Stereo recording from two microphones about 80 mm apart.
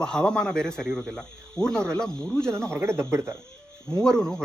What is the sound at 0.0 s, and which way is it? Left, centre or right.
Speech, centre.